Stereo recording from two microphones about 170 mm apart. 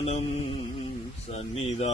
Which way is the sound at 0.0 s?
35° left (ahead or behind).